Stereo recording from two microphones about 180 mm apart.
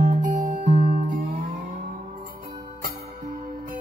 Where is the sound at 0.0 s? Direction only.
45° right (ahead or behind).